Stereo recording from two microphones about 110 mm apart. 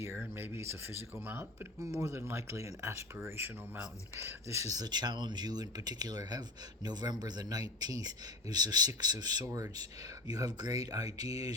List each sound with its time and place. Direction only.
0.0 s speech: 20° right (ahead or behind)
1.8 s speech: 30° right (ahead or behind)